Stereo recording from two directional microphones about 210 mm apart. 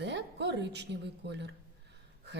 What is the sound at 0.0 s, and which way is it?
A woman's voice, 55° right (ahead or behind).